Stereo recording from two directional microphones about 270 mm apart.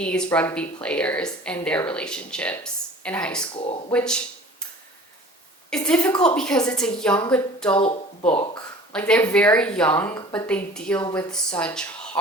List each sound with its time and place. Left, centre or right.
0.0 s a woman's voice: centre
3.6 s speech: left
3.9 s a woman's voice: centre
5.7 s a woman's voice: centre
7.8 s speech: left
8.9 s a woman's voice: centre